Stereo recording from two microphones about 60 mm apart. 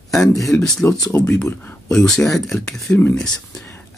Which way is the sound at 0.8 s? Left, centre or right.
Left.